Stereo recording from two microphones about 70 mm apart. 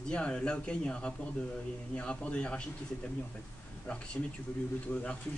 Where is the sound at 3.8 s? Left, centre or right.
Centre.